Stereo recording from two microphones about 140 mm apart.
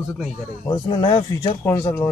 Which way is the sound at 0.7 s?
30° left (ahead or behind).